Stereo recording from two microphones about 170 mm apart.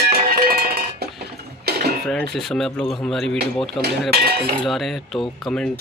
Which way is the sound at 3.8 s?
70° right (ahead or behind).